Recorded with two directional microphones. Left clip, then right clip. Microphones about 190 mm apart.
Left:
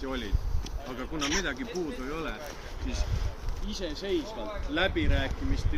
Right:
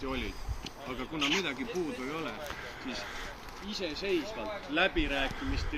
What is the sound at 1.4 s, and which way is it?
Speech, 20° left (ahead or behind).